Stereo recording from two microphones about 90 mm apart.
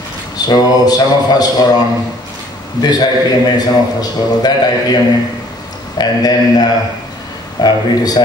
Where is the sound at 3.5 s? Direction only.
50° left (ahead or behind).